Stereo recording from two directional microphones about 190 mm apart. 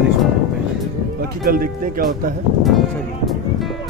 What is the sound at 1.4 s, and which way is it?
Speech, 50° right (ahead or behind).